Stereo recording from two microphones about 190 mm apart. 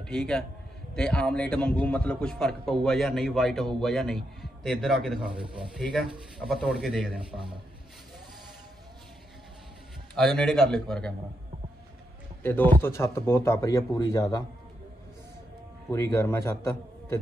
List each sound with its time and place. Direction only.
0.0 s a man's voice: 5° left (ahead or behind)
10.1 s a man's voice: 5° left (ahead or behind)
12.4 s speech: 10° left (ahead or behind)
15.9 s speech: 15° left (ahead or behind)